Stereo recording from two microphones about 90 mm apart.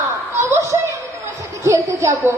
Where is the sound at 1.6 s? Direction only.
35° right (ahead or behind).